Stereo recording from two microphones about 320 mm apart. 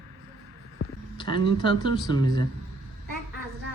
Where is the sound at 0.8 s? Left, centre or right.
Left.